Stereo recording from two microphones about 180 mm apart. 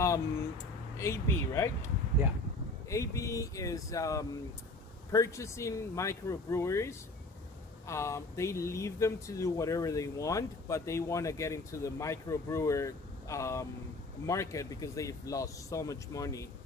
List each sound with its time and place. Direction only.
0.9 s speech: 15° left (ahead or behind)
2.9 s speech: 15° left (ahead or behind)